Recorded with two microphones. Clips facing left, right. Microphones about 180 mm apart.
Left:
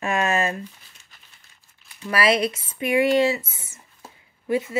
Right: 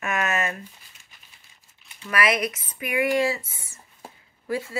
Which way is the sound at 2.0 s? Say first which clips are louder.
Left 3 dB; 30° left (ahead or behind).